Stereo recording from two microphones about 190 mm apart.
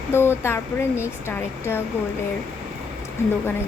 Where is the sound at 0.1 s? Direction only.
10° left (ahead or behind).